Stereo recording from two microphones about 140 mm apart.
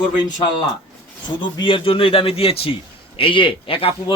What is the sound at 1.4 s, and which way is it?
A man's voice, 35° left (ahead or behind).